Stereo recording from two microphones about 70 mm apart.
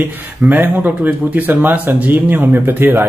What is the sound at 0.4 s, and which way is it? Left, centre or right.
Speech, right.